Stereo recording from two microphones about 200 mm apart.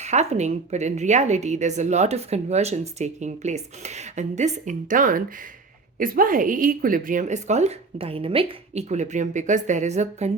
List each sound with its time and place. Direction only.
0.0 s speech: 35° right (ahead or behind)